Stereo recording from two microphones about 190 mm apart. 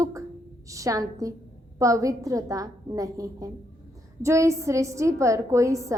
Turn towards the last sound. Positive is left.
turn(degrees=-15)  # may be behind; listen again after turning